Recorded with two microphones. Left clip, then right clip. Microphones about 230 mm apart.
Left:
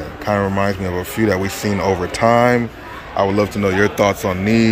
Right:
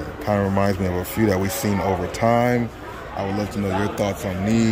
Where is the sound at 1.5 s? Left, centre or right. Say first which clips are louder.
Left 3 dB; right.